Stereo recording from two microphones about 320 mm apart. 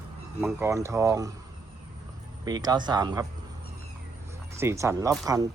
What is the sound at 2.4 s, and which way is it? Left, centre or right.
Speech, centre.